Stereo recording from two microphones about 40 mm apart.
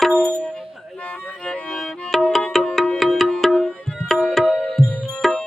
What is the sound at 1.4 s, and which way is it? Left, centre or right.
Music, left.